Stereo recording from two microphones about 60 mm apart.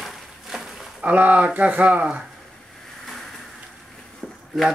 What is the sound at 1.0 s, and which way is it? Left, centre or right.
A man's voice, right.